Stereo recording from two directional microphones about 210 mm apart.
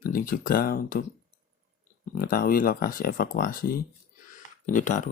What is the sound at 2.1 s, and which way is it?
Speech, 40° left (ahead or behind).